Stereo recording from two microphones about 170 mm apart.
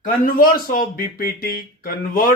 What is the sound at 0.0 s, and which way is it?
Speech, 55° left (ahead or behind).